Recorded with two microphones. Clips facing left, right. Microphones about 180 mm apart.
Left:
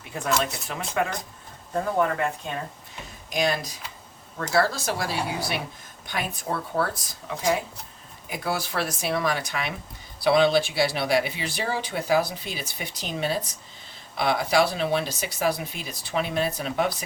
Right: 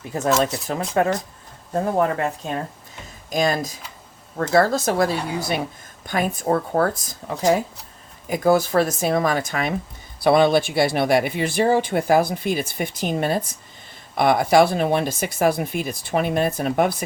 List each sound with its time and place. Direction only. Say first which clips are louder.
0.1 s speech: right 6 dB; 40° right (ahead or behind)